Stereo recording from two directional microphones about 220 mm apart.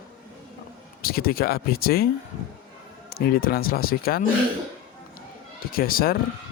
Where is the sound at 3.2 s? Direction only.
40° left (ahead or behind).